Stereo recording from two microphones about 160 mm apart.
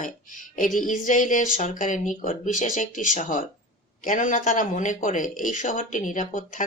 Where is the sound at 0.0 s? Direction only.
55° left (ahead or behind).